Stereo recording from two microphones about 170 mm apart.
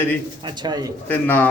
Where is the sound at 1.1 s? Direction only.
10° left (ahead or behind).